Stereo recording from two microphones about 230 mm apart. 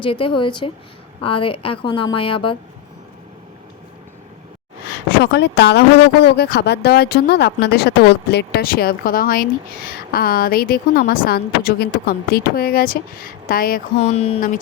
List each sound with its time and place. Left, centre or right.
0.0 s a woman's voice: left
5.2 s speech: left